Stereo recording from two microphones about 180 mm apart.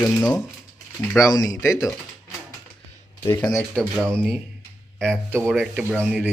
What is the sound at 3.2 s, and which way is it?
Speech, 15° left (ahead or behind).